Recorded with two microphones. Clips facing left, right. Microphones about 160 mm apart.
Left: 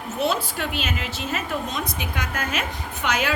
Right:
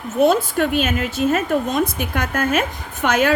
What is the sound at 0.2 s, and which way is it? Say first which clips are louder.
A woman's voice: right 9 dB; 50° right (ahead or behind).